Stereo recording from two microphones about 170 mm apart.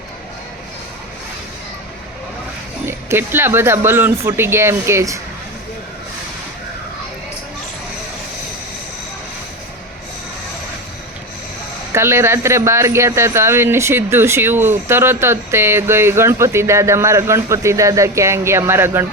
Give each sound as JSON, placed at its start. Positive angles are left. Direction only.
{"t": 2.8, "sound": "speech", "side_deg": -15}
{"t": 11.9, "sound": "speech", "side_deg": -15}